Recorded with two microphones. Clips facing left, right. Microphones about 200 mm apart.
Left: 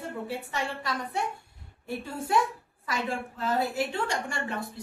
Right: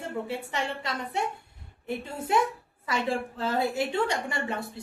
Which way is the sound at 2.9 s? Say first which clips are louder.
Right 3 dB; 30° right (ahead or behind).